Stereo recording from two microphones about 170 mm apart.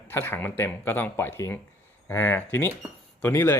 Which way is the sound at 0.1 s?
15° left (ahead or behind).